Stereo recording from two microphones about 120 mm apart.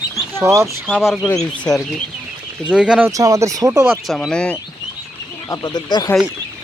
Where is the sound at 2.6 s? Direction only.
10° right (ahead or behind).